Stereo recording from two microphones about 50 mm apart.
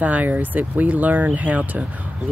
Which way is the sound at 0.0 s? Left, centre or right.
Right.